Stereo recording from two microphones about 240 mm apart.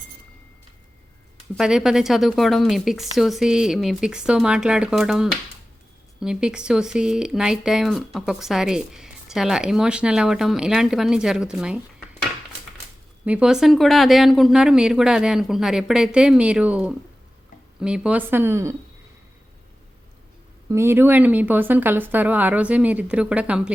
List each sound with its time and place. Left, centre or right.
1.5 s speech: centre
13.2 s a woman's voice: centre
20.7 s a woman's voice: centre